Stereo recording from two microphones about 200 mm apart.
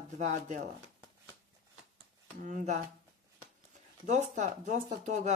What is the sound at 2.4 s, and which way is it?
Speech, 40° right (ahead or behind).